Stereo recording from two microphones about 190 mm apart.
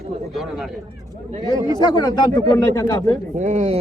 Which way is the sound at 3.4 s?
40° right (ahead or behind).